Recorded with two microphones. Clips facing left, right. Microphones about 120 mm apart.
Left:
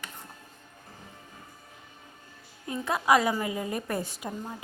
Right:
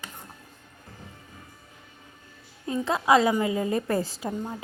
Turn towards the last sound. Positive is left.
turn(degrees=-30)  # may be behind; listen again after turning